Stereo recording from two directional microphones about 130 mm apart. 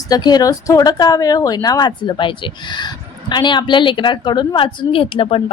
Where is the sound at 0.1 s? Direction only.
30° left (ahead or behind).